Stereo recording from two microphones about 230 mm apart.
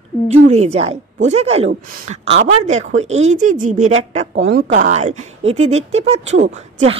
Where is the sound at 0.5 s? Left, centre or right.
Right.